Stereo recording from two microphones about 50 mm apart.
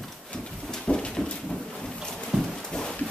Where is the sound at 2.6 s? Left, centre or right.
Centre.